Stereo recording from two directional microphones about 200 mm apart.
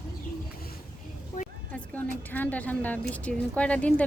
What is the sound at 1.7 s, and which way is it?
A woman's voice, 10° left (ahead or behind).